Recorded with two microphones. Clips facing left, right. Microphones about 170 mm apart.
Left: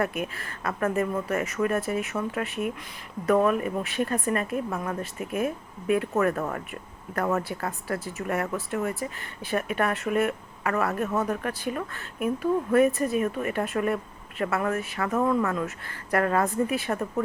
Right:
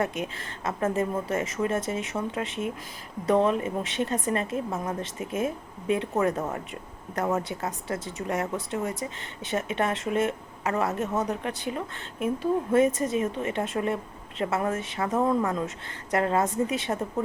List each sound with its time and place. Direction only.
0.0 s speech: 25° right (ahead or behind)